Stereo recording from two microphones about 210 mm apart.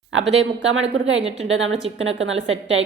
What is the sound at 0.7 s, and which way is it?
A man's voice, 65° right (ahead or behind).